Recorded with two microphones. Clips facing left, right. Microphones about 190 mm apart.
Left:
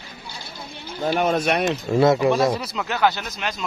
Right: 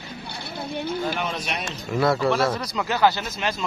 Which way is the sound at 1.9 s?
20° left (ahead or behind).